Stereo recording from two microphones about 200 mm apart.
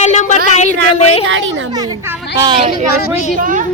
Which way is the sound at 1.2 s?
70° right (ahead or behind).